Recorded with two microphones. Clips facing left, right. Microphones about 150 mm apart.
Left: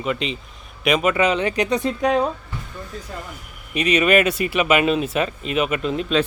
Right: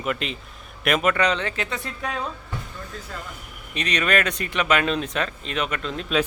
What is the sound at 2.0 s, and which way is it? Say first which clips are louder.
Speech: left 10 dB; 40° left (ahead or behind).